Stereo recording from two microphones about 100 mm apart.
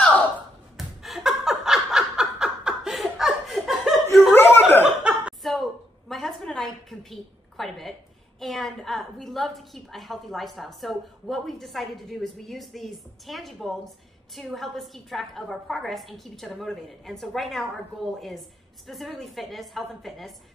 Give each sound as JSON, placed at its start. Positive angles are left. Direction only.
{"t": 0.7, "sound": "laughter", "side_deg": 0}
{"t": 4.3, "sound": "chuckle", "side_deg": 20}
{"t": 4.8, "sound": "chuckle", "side_deg": -10}
{"t": 5.4, "sound": "a sound", "side_deg": 0}
{"t": 8.4, "sound": "a woman's voice", "side_deg": 0}